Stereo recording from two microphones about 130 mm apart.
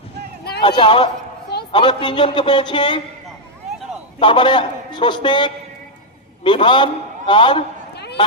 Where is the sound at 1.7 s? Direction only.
40° left (ahead or behind).